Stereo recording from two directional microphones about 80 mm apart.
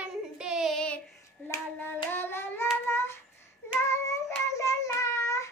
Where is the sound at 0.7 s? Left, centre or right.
Centre.